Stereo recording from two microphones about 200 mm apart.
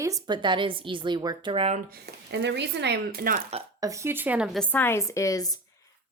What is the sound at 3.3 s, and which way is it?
Speech, 30° right (ahead or behind).